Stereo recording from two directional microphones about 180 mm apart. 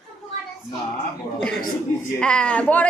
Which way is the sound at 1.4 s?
5° left (ahead or behind).